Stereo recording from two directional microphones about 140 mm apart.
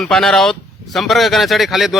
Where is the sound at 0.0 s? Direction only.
5° left (ahead or behind).